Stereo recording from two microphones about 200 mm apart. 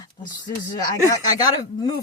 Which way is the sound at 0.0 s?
20° left (ahead or behind).